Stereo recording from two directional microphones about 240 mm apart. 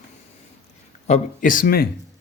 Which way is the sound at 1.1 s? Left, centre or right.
Left.